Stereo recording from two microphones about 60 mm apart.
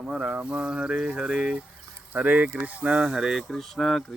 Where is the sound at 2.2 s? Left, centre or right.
Right.